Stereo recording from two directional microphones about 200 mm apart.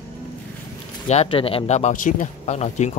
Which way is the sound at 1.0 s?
30° left (ahead or behind).